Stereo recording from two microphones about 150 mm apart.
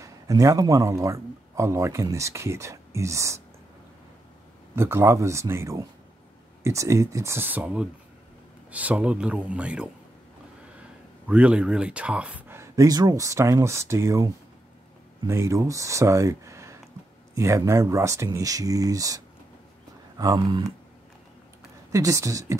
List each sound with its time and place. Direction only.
0.0 s speech: 20° right (ahead or behind)
4.7 s speech: 15° right (ahead or behind)
11.2 s speech: 10° right (ahead or behind); by 20.7 s 25° right (ahead or behind)
21.9 s speech: 20° right (ahead or behind)